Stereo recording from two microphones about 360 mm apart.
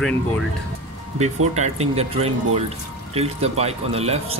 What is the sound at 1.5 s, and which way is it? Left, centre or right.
Speech, centre.